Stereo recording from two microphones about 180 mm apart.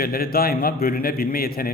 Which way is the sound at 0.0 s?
55° left (ahead or behind).